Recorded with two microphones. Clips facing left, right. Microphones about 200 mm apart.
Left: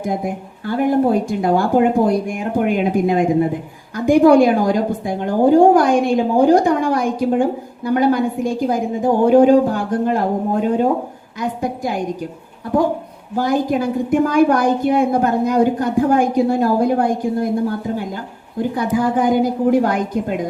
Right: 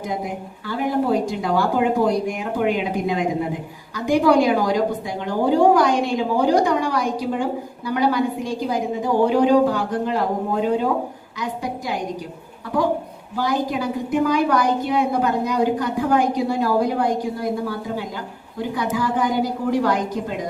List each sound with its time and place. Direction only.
0.0 s a woman's voice: 50° left (ahead or behind)
13.3 s a woman's voice: 50° left (ahead or behind)